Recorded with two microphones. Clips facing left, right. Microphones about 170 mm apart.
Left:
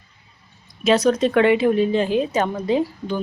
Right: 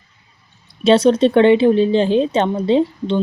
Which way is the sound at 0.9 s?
30° right (ahead or behind).